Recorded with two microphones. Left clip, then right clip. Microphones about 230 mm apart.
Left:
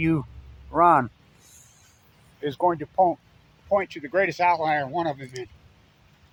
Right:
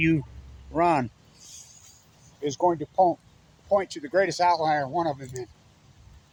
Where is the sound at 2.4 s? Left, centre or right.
Centre.